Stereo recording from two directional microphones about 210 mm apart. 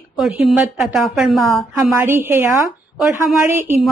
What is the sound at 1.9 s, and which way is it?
A woman's voice, 10° right (ahead or behind).